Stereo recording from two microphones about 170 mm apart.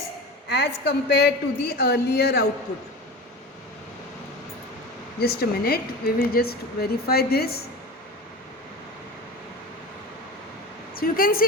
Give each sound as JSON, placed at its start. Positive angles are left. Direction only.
{"t": 0.4, "sound": "a woman's voice", "side_deg": 80}
{"t": 5.2, "sound": "speech", "side_deg": 65}
{"t": 10.9, "sound": "speech", "side_deg": 60}